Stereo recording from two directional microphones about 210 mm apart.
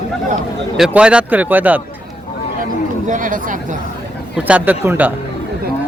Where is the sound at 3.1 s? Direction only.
40° right (ahead or behind).